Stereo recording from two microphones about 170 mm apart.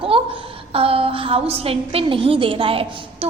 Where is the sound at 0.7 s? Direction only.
35° right (ahead or behind).